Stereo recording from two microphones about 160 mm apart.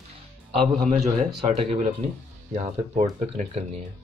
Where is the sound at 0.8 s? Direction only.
50° right (ahead or behind).